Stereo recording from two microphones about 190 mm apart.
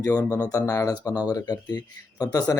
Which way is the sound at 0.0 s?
20° left (ahead or behind).